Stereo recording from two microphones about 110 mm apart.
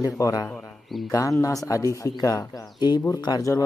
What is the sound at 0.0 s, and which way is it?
Speech, 35° left (ahead or behind).